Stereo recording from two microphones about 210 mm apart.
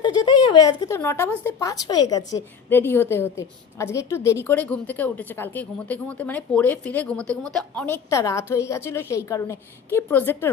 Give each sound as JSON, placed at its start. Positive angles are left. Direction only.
{"t": 0.0, "sound": "a woman's voice", "side_deg": 20}